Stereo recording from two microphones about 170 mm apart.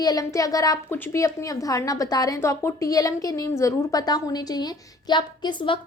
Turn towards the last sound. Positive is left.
turn(degrees=30)  # may be behind; listen again after turning